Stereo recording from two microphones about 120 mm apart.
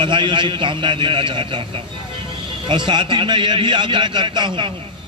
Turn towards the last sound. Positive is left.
turn(degrees=-40)  # may be behind; listen again after turning